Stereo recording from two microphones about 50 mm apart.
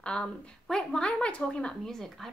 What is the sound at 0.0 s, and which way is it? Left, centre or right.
Speech, centre.